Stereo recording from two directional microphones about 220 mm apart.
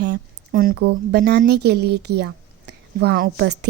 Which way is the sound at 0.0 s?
45° right (ahead or behind).